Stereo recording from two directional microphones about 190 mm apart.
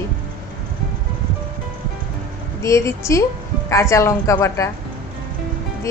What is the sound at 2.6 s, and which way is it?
Speech, 15° left (ahead or behind).